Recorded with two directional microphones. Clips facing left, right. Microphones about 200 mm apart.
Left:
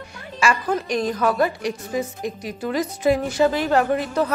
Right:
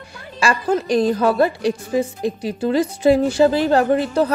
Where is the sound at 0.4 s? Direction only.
35° right (ahead or behind).